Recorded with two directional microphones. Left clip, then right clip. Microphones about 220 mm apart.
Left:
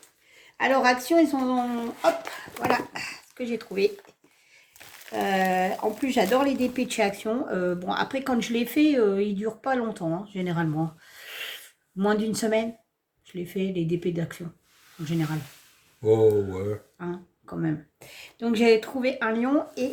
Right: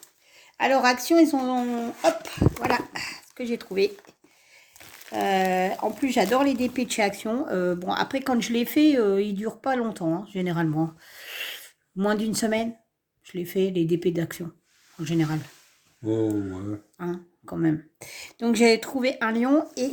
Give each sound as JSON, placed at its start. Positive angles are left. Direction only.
{"t": 0.5, "sound": "speech", "side_deg": -40}
{"t": 5.1, "sound": "speech", "side_deg": -45}
{"t": 17.0, "sound": "speech", "side_deg": -50}